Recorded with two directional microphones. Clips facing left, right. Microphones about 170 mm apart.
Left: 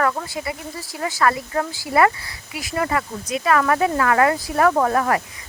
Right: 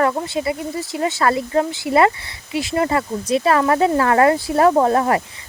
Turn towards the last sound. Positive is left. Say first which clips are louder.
# right 3 dB
turn(degrees=-25)  # may be behind; listen again after turning